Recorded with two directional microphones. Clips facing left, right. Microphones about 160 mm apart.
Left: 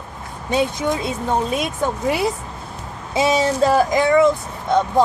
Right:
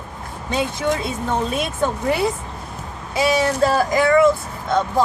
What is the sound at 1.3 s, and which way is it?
Speech, 10° left (ahead or behind).